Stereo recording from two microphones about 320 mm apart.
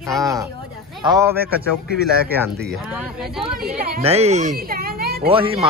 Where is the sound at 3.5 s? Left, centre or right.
Right.